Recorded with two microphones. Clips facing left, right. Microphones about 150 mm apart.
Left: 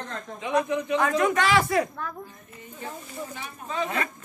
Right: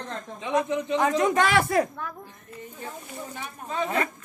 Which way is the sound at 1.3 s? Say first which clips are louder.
Right 1 dB; 45° right (ahead or behind).